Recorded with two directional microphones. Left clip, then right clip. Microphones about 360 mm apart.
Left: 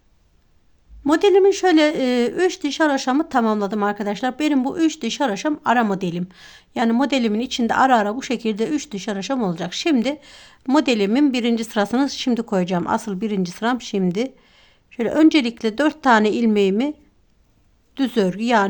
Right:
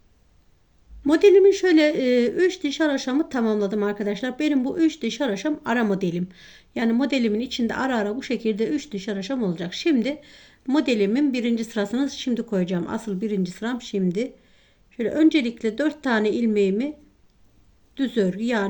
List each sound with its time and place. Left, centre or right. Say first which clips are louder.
1.0 s a woman's voice: even; centre
17.9 s speech: left 3 dB; centre